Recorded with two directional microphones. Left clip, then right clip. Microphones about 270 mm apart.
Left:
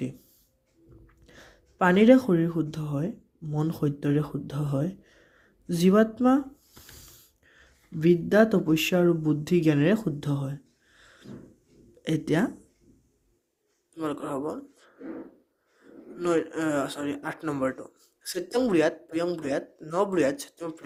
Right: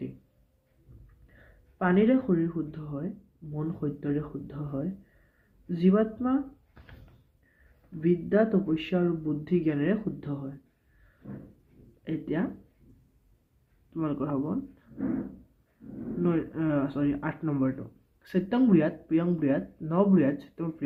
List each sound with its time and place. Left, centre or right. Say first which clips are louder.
1.3 s speech: left 7 dB; left
8.0 s speech: left 4 dB; left
12.0 s speech: left 6 dB; left
14.0 s speech: even; left
16.2 s speech: left 4 dB; left